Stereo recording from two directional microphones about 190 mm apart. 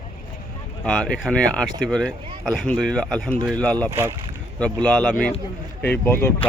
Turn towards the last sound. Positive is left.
turn(degrees=10)  # may be behind; listen again after turning